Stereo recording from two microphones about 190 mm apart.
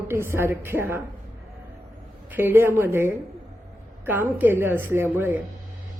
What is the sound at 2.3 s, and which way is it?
A woman's voice, 10° right (ahead or behind).